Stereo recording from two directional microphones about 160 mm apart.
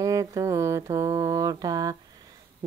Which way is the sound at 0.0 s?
20° right (ahead or behind).